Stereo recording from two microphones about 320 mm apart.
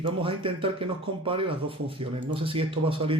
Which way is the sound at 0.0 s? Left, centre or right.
Centre.